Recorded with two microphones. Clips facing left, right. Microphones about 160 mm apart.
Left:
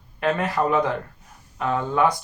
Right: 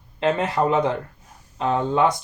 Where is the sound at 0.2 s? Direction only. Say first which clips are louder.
Right 2 dB; 20° right (ahead or behind).